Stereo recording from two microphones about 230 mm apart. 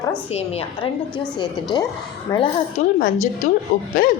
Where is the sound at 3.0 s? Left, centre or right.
Left.